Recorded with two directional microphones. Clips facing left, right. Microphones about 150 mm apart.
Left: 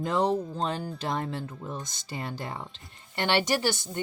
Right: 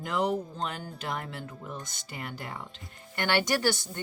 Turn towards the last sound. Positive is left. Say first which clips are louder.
# even
turn(degrees=20)  # may be behind; listen again after turning